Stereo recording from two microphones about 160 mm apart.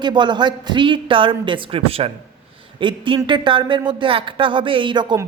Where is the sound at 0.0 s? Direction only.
30° right (ahead or behind).